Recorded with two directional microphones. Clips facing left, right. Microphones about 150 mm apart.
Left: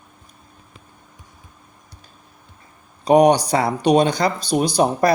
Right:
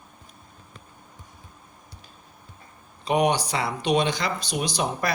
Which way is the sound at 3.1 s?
40° left (ahead or behind).